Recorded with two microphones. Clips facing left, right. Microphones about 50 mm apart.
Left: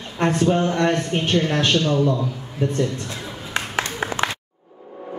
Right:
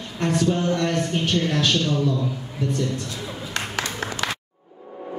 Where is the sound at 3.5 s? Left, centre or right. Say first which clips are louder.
Left 4 dB; left.